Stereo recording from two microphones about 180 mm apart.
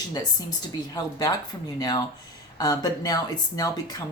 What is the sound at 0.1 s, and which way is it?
Speech, 20° left (ahead or behind).